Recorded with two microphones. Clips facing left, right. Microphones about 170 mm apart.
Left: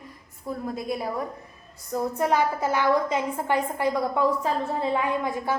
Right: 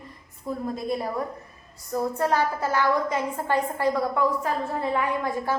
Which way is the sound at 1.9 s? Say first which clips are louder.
Even; 15° left (ahead or behind).